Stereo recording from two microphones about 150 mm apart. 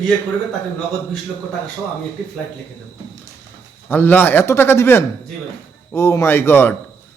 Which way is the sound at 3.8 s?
10° left (ahead or behind).